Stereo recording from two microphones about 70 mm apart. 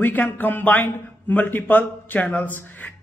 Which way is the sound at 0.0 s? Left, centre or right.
Left.